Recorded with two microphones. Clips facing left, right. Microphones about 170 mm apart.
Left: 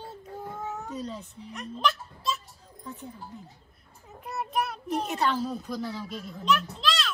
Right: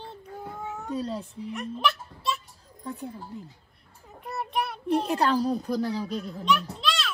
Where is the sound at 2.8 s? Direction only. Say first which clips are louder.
Right 5 dB; 35° right (ahead or behind).